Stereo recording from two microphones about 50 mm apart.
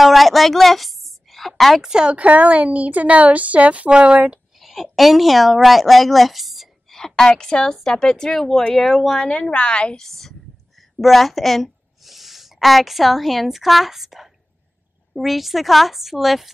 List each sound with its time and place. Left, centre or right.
0.0 s a sound: centre
1.5 s speech: centre
1.8 s speech: centre
4.6 s a woman's voice: centre
7.0 s a woman's voice: centre
9.2 s speech: centre
9.9 s a woman's voice: centre